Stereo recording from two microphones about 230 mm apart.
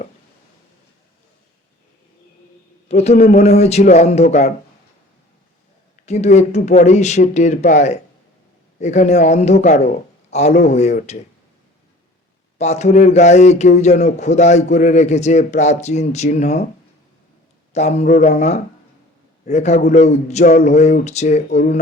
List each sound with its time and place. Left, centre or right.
2.9 s speech: left
6.1 s speech: left
12.5 s speech: left
17.7 s speech: left